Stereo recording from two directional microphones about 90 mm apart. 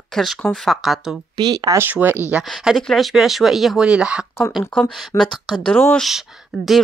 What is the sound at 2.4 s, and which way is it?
Speech, centre (ahead or behind).